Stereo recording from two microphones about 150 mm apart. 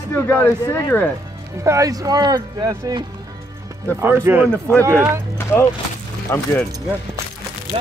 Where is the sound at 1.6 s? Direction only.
20° right (ahead or behind).